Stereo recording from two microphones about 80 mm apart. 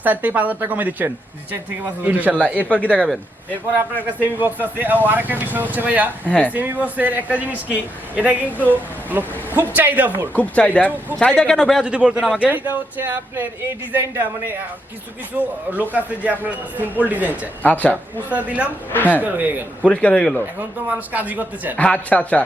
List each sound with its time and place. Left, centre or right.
0.0 s a man's voice: right
2.7 s speech: centre
4.2 s a man's voice: right
6.2 s speech: centre
6.5 s a man's voice: right
10.3 s speech: centre
11.5 s speech: centre
11.9 s a man's voice: centre
17.6 s speech: centre
18.3 s a man's voice: centre
19.8 s speech: centre
20.6 s a man's voice: right
21.8 s speech: centre